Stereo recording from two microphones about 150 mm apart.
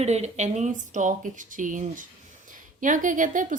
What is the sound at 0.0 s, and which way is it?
Speech, 50° right (ahead or behind).